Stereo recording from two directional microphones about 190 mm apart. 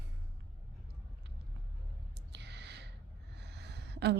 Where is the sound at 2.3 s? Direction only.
60° right (ahead or behind).